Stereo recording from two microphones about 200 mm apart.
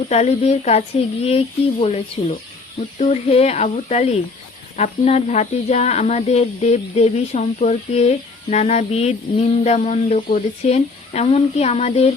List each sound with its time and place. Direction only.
0.1 s speech: 35° left (ahead or behind)
3.0 s speech: 30° left (ahead or behind)